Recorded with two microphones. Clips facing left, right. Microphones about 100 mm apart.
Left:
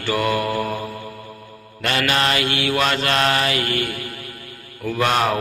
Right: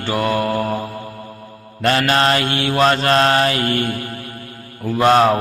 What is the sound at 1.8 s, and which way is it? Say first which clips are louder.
Mantra: right 5 dB; 35° right (ahead or behind).